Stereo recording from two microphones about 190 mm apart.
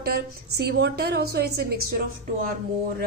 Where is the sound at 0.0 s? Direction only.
55° right (ahead or behind).